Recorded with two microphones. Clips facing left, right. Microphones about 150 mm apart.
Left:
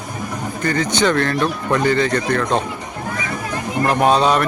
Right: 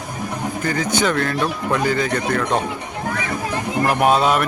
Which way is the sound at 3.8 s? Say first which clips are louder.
Left 1 dB; 10° right (ahead or behind).